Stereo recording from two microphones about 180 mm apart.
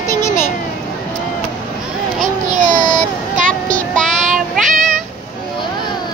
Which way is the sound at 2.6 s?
45° right (ahead or behind).